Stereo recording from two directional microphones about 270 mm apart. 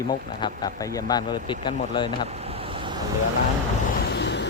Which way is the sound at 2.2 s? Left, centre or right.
Right.